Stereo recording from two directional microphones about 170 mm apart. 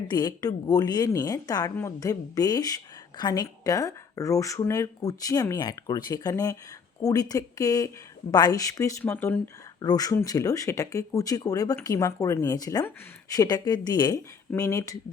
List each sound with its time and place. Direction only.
0.1 s speech: 25° left (ahead or behind)
9.8 s speech: 20° left (ahead or behind)